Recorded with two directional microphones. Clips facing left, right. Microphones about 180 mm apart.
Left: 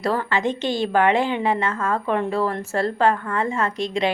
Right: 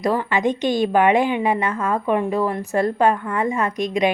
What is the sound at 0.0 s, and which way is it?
A woman's voice, 15° right (ahead or behind).